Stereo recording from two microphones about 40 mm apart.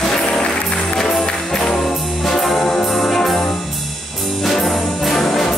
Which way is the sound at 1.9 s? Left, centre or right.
Centre.